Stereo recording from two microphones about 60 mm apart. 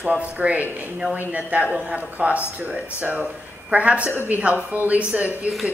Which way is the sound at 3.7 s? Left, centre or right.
Right.